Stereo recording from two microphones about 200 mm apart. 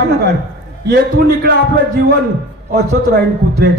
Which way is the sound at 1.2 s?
50° right (ahead or behind).